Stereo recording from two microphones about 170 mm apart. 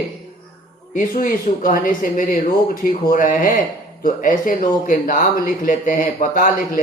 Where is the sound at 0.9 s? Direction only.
55° left (ahead or behind).